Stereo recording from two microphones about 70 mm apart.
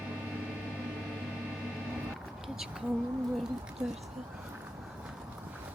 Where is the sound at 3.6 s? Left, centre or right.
Centre.